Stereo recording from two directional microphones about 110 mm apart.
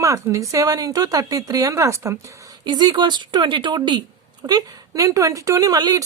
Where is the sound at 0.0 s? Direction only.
30° right (ahead or behind).